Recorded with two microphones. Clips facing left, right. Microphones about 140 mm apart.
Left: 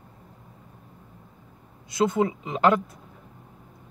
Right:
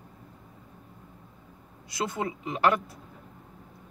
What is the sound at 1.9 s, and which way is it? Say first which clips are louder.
Speech: left 8 dB; 25° left (ahead or behind).